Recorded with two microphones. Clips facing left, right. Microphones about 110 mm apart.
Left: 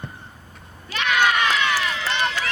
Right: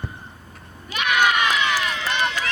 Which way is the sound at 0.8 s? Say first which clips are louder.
Even; 15° right (ahead or behind).